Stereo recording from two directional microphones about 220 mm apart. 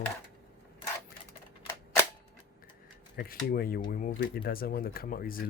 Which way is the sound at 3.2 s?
40° left (ahead or behind).